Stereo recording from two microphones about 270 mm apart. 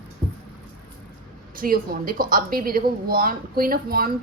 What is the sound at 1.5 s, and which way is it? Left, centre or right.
A woman's voice, right.